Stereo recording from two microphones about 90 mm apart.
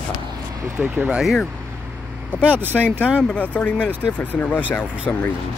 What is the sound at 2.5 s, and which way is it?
Speech, 25° right (ahead or behind).